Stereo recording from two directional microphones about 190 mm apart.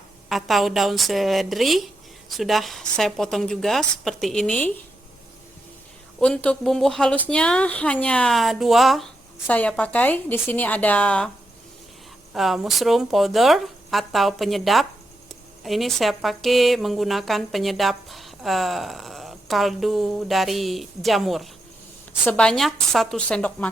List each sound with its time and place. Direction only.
0.3 s a woman's voice: centre (ahead or behind)
6.1 s a woman's voice: 5° left (ahead or behind)
12.3 s a woman's voice: centre (ahead or behind)